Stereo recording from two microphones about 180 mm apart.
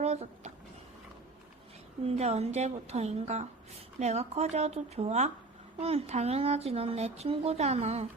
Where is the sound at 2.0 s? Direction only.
35° right (ahead or behind).